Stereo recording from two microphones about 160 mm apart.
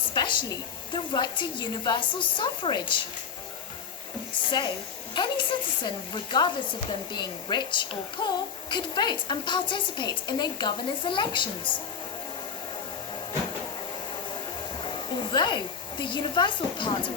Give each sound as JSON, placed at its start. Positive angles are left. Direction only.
{"t": 0.1, "sound": "a woman's voice", "side_deg": 30}
{"t": 5.1, "sound": "a woman's voice", "side_deg": 30}
{"t": 14.8, "sound": "a woman's voice", "side_deg": 30}